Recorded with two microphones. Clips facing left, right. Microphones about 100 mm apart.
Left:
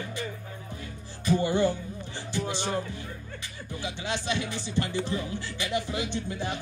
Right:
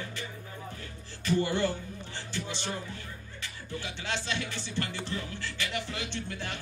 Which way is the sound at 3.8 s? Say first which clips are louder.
Left 5 dB; 15° left (ahead or behind).